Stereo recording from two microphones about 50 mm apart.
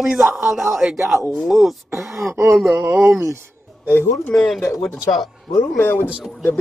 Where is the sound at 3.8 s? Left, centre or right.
Left.